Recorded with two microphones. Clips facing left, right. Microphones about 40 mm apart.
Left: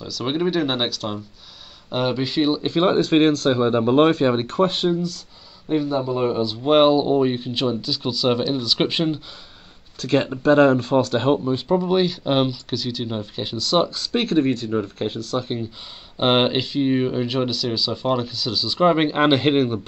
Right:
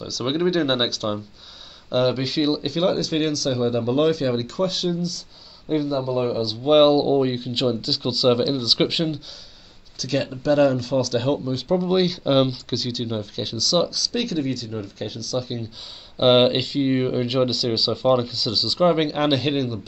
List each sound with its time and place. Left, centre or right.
0.0 s speech: centre
2.6 s speech: left
5.7 s speech: centre
9.9 s speech: left
11.4 s speech: left
11.7 s speech: centre
13.4 s speech: left
16.2 s speech: centre; by 19.8 s left